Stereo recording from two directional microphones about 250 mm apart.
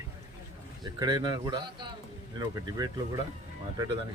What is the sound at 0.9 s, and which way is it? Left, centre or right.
Speech, centre.